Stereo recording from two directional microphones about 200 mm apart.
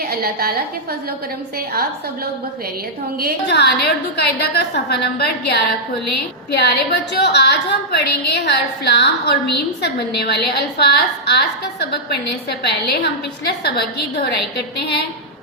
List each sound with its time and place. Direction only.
0.1 s a woman's voice: 50° right (ahead or behind)
3.5 s a woman's voice: 55° left (ahead or behind)
6.6 s a woman's voice: 55° left (ahead or behind)